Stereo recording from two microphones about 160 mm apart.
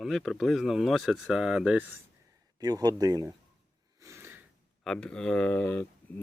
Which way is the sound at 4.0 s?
15° right (ahead or behind).